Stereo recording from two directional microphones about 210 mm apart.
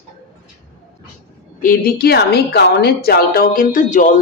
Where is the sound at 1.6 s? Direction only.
40° left (ahead or behind).